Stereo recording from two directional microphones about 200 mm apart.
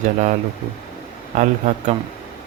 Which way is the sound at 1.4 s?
35° right (ahead or behind).